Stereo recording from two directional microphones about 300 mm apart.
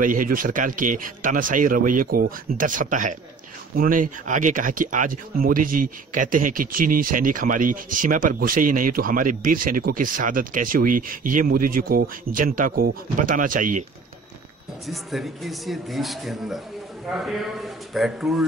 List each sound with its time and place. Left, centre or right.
0.0 s speech: right
14.9 s speech: centre